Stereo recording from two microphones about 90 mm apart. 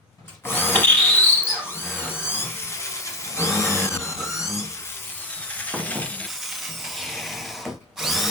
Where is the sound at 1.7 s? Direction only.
25° left (ahead or behind).